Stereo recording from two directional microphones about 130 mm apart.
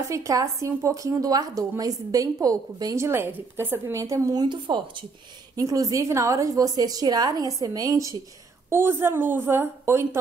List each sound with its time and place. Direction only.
0.1 s speech: 25° right (ahead or behind)
5.6 s a woman's voice: 25° right (ahead or behind)